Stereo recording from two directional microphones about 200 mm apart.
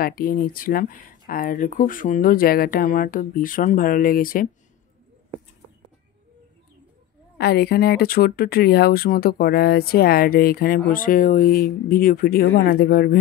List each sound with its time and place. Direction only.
0.0 s speech: 45° left (ahead or behind)
7.3 s speech: 55° left (ahead or behind)